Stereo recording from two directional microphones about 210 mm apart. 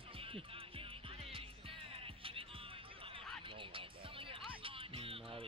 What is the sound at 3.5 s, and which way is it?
Music, 25° right (ahead or behind).